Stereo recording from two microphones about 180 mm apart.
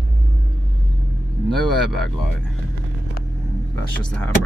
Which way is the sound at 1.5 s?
Centre (ahead or behind).